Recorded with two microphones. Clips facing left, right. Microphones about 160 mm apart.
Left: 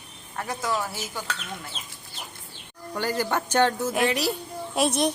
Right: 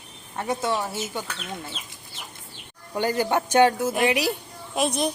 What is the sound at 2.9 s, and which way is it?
Speech, 15° right (ahead or behind).